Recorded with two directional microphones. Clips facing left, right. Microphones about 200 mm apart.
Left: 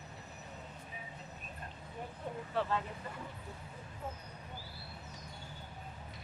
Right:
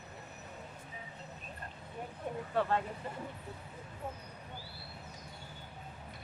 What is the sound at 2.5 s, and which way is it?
Speech, 50° right (ahead or behind).